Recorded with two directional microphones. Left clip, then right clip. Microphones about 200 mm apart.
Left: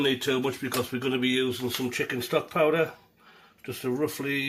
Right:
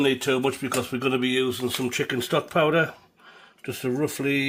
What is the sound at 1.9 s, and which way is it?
Speech, 50° right (ahead or behind).